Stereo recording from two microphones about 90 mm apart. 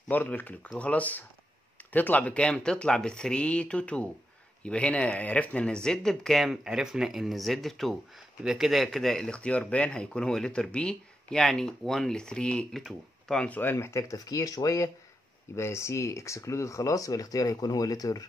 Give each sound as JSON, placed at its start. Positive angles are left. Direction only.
{"t": 0.1, "sound": "speech", "side_deg": 20}